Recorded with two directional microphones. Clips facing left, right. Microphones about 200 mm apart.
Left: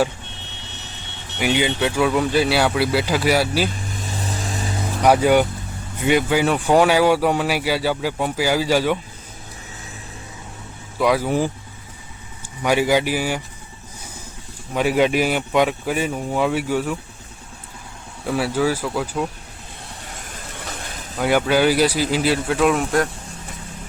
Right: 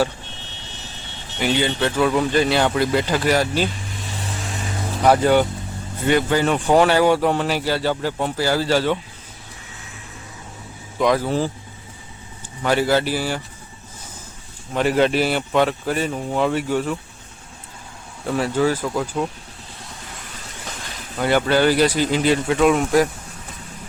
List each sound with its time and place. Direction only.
1.4 s speech: 10° left (ahead or behind)
3.7 s vehicle: 45° left (ahead or behind)
5.0 s speech: 10° left (ahead or behind)
10.9 s speech: 10° left (ahead or behind)
12.6 s speech: 10° left (ahead or behind)
14.7 s speech: 10° left (ahead or behind)
18.3 s speech: 10° left (ahead or behind)
21.2 s speech: 10° left (ahead or behind)